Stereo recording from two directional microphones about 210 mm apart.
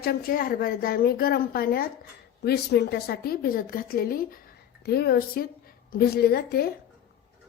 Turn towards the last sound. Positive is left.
turn(degrees=50)  # may be behind; listen again after turning